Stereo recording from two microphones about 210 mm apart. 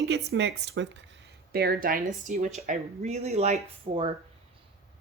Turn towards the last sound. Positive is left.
turn(degrees=-30)  # may be behind; listen again after turning